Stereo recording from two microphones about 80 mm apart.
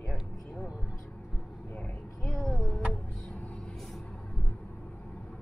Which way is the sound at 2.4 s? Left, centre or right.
Centre.